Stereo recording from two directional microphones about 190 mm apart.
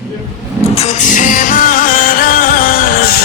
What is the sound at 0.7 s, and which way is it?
Music, 35° left (ahead or behind).